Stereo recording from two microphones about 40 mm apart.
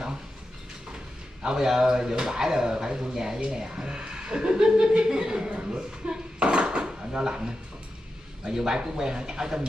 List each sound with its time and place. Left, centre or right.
1.4 s speech: centre